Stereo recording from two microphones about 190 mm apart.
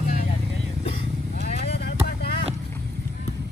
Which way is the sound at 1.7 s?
55° left (ahead or behind).